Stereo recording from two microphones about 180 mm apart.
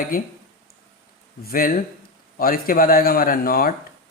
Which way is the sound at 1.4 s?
50° left (ahead or behind).